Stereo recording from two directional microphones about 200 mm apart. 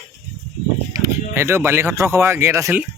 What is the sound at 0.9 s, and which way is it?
Speech, 15° right (ahead or behind).